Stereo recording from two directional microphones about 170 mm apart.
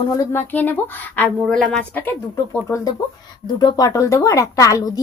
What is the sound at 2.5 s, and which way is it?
Speech, 20° left (ahead or behind).